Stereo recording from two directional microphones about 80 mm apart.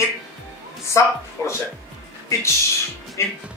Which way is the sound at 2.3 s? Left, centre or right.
Left.